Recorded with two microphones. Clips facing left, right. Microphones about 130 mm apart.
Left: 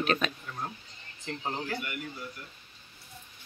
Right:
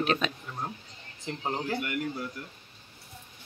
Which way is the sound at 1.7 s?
80° right.